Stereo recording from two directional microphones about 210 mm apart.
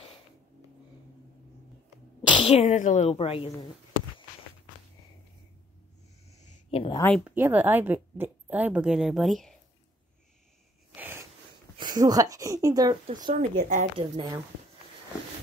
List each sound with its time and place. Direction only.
2.2 s speech: 25° left (ahead or behind)
6.3 s a sound: 25° left (ahead or behind)
7.0 s speech: 5° left (ahead or behind)
7.2 s a woman's voice: 10° right (ahead or behind)
11.0 s a sound: 10° right (ahead or behind)
11.8 s a woman's voice: 20° right (ahead or behind)
13.3 s speech: 40° right (ahead or behind)
13.9 s a woman's voice: 20° right (ahead or behind)